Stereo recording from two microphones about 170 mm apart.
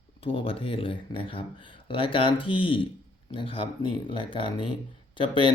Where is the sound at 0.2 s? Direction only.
30° left (ahead or behind).